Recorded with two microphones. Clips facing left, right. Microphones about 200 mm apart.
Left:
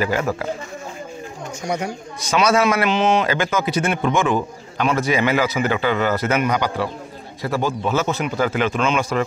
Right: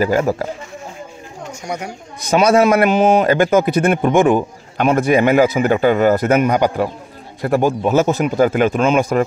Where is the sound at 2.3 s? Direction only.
55° right (ahead or behind).